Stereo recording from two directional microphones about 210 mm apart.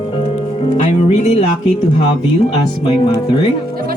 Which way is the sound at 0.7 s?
30° left (ahead or behind).